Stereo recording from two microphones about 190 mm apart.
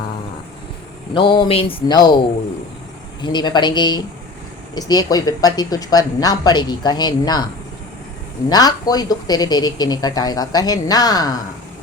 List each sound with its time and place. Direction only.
1.1 s speech: 25° left (ahead or behind)
3.2 s speech: 25° left (ahead or behind)
8.4 s speech: 20° left (ahead or behind)